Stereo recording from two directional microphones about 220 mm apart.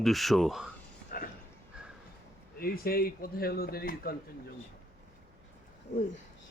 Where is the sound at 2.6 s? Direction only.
45° left (ahead or behind).